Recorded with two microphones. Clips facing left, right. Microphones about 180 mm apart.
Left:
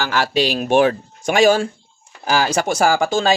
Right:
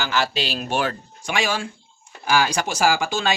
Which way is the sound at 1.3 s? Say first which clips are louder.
Left 10 dB; 40° left (ahead or behind).